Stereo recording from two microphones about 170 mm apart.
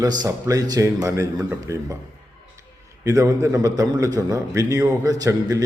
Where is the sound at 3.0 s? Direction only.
20° right (ahead or behind).